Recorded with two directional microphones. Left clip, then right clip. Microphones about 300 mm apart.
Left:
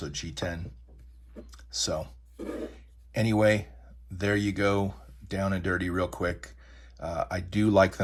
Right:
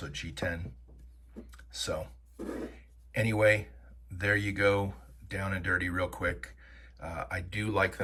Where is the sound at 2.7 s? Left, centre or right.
Centre.